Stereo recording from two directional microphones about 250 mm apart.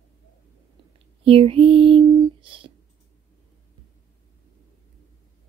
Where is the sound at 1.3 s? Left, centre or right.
Right.